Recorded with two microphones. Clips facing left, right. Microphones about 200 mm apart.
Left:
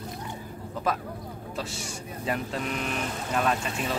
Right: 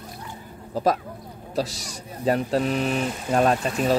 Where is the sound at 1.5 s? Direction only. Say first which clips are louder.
Right 9 dB; 35° right (ahead or behind).